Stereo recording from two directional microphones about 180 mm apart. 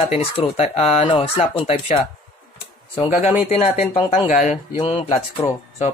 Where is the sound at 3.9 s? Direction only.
35° left (ahead or behind).